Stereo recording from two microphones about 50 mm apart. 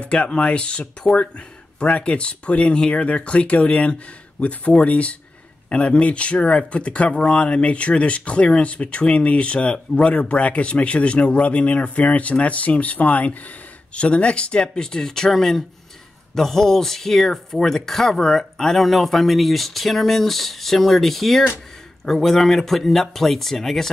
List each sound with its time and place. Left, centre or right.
0.0 s speech: left; by 23.9 s centre